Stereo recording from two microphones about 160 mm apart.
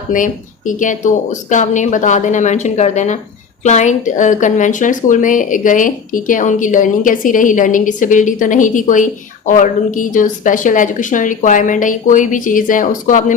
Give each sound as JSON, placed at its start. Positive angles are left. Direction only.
{"t": 0.1, "sound": "speech", "side_deg": 55}